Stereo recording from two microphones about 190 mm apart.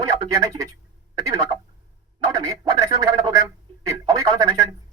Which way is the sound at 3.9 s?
20° right (ahead or behind).